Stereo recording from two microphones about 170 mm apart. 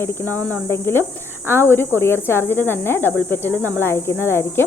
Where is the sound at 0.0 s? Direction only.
15° left (ahead or behind).